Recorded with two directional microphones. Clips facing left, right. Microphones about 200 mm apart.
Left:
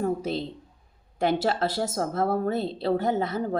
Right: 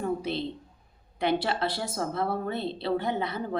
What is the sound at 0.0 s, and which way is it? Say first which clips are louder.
Speech: left 2 dB; 45° left (ahead or behind).